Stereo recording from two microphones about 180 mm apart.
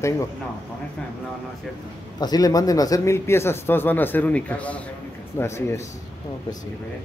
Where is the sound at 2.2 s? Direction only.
20° left (ahead or behind).